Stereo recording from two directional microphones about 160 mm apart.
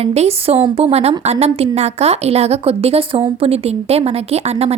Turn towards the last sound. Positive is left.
turn(degrees=-40)  # may be behind; listen again after turning